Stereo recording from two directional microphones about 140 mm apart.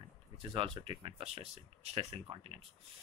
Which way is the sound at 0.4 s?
35° right (ahead or behind).